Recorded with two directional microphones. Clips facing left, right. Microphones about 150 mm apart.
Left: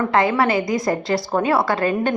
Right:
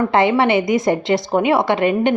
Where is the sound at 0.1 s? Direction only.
25° right (ahead or behind).